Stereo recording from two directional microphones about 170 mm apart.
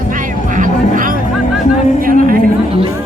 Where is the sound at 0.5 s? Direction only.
50° right (ahead or behind).